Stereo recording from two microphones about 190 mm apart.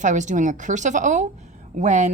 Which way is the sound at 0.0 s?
40° right (ahead or behind).